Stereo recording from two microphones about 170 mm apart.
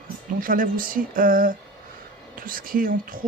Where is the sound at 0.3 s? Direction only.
55° right (ahead or behind).